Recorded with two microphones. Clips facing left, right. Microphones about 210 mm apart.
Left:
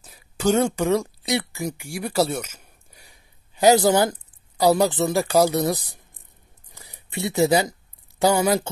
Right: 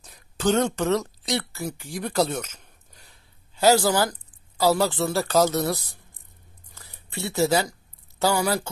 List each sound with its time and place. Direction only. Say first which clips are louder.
0.0 s speech: left 2 dB; 5° left (ahead or behind)
6.7 s a sound: left 3 dB; 15° left (ahead or behind)
8.2 s speech: left 4 dB; 20° left (ahead or behind)